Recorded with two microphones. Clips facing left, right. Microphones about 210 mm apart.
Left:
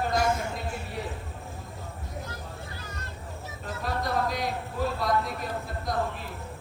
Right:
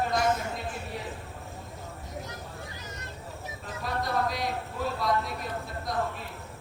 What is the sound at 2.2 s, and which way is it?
Vehicle, 20° right (ahead or behind).